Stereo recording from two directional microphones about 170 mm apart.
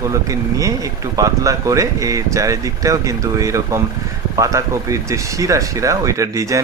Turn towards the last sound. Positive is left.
turn(degrees=-20)  # may be behind; listen again after turning